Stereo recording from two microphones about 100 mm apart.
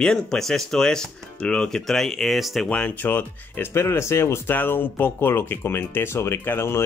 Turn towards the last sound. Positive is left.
turn(degrees=25)  # may be behind; listen again after turning